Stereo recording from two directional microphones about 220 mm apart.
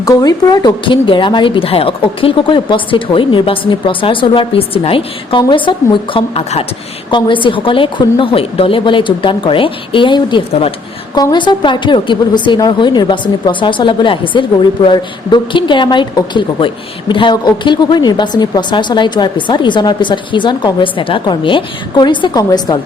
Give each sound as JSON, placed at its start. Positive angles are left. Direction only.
{"t": 0.0, "sound": "a woman's voice", "side_deg": 15}